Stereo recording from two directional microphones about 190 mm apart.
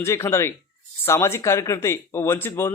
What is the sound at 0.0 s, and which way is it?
Speech, 15° left (ahead or behind).